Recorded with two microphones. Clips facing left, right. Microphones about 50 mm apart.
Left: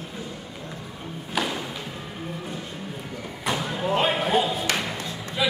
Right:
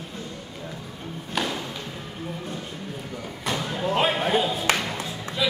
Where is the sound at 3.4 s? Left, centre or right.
Centre.